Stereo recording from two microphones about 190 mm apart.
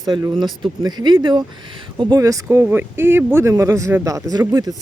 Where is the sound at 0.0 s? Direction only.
15° right (ahead or behind).